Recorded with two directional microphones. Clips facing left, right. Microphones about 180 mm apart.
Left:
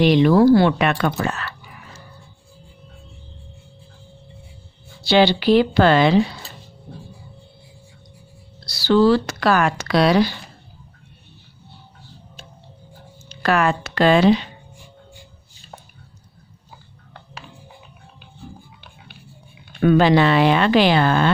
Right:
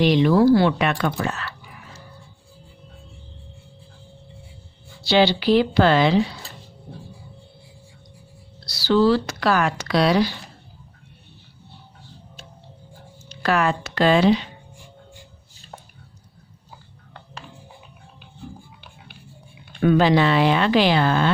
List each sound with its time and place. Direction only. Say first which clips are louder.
0.0 s speech: left 2 dB; 60° left (ahead or behind)
5.0 s speech: left 2 dB; 60° left (ahead or behind)
8.8 s speech: left 2 dB; 55° left (ahead or behind)
13.2 s speech: left 2 dB; 60° left (ahead or behind)
19.8 s speech: left 2 dB; 60° left (ahead or behind)